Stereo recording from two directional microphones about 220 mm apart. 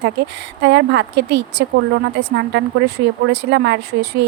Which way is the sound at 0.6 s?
50° right (ahead or behind).